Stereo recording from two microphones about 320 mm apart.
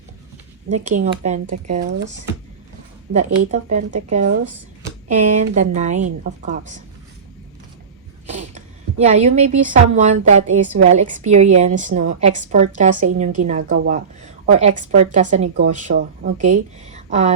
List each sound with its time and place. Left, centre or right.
0.7 s a woman's voice: right
3.1 s a woman's voice: right
8.3 s a woman's voice: right